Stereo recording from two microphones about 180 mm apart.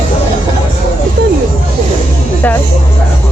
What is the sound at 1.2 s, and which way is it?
Speech, 60° right (ahead or behind).